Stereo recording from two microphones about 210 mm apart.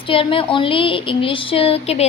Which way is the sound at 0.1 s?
25° left (ahead or behind).